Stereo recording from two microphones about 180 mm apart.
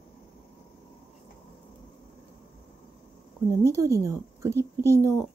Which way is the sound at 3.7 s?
15° right (ahead or behind).